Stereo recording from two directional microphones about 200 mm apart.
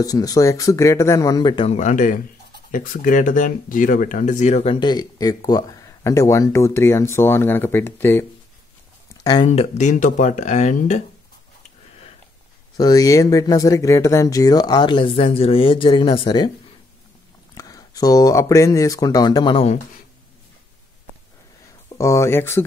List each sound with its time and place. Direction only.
0.0 s speech: 20° left (ahead or behind)
1.8 s speech: 40° left (ahead or behind)
4.7 s speech: 20° left (ahead or behind)
9.5 s speech: 35° left (ahead or behind)
12.7 s speech: 20° left (ahead or behind)
17.6 s speech: 20° left (ahead or behind)
21.8 s speech: 15° left (ahead or behind)